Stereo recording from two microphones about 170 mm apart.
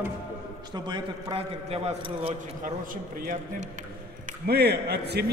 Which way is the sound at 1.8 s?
40° right (ahead or behind).